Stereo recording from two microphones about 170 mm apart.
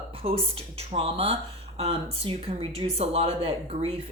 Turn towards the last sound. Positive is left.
turn(degrees=-35)  # may be behind; listen again after turning